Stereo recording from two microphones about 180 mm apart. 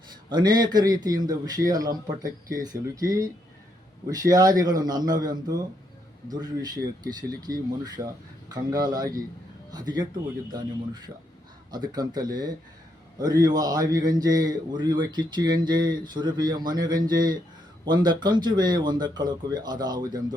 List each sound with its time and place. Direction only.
0.3 s speech: 25° right (ahead or behind)